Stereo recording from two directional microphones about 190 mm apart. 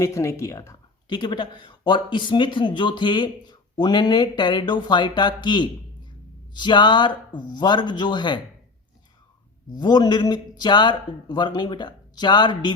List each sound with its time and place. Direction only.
0.0 s speech: 15° left (ahead or behind)
9.7 s speech: 20° left (ahead or behind)